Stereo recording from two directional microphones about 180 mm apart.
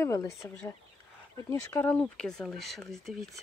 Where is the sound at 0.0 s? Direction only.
15° left (ahead or behind).